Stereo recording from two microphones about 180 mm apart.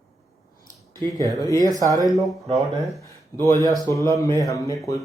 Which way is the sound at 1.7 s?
20° right (ahead or behind).